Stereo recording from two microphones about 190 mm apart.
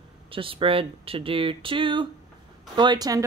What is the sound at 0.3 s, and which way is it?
Speech, 30° right (ahead or behind).